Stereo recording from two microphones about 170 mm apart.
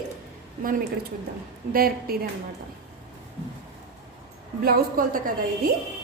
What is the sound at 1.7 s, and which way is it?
Speech, 60° right (ahead or behind).